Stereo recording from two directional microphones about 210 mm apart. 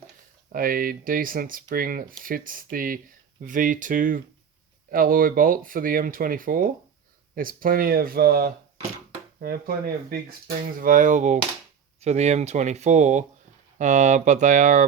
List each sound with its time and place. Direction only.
0.5 s speech: 45° right (ahead or behind)